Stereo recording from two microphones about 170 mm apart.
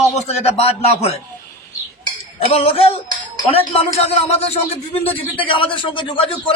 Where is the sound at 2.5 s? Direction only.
35° left (ahead or behind).